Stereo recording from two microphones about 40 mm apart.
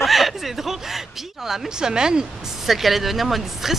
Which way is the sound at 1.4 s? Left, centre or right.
Centre.